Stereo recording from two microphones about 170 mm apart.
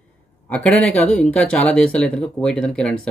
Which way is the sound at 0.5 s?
5° left (ahead or behind).